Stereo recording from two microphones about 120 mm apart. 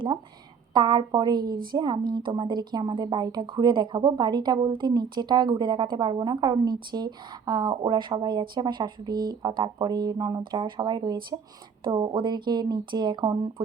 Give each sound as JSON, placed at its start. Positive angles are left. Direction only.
{"t": 0.7, "sound": "a woman's voice", "side_deg": -40}